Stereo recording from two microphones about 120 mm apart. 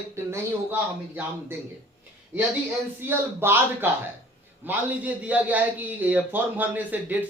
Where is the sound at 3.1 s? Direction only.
15° right (ahead or behind).